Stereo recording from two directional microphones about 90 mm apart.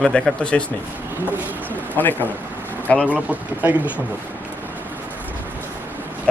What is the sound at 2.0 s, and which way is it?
A man's voice, 20° left (ahead or behind).